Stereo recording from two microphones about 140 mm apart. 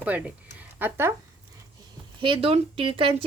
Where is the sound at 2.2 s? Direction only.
40° right (ahead or behind).